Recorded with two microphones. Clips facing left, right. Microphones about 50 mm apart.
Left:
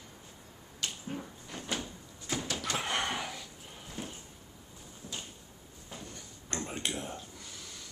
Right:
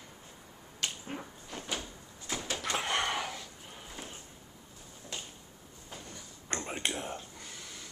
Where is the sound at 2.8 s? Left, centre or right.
Centre.